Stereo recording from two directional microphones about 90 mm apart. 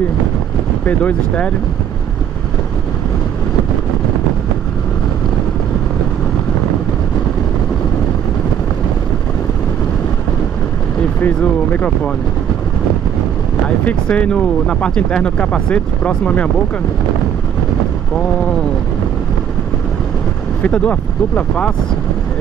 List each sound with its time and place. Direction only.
0.8 s speech: 15° left (ahead or behind)
11.1 s speech: 20° left (ahead or behind)
13.7 s speech: 15° left (ahead or behind)
20.6 s speech: 15° left (ahead or behind)